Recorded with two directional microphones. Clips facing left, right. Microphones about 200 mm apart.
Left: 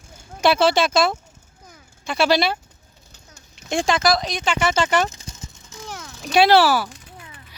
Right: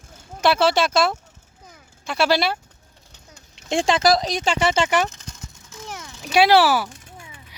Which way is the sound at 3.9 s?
35° right (ahead or behind).